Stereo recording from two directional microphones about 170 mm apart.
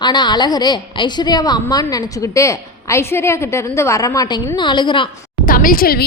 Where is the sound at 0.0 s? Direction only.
25° left (ahead or behind).